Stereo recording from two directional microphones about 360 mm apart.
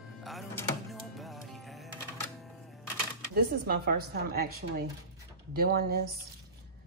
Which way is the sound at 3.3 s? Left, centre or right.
Right.